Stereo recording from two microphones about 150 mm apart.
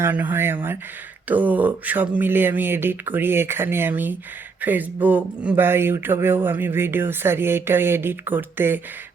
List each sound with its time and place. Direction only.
0.0 s speech: 15° right (ahead or behind)